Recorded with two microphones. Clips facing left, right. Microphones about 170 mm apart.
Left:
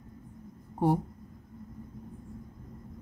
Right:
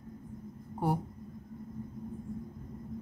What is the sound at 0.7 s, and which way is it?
Speech, 25° left (ahead or behind).